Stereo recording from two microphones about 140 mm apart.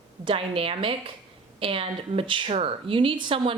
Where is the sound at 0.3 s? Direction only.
40° right (ahead or behind).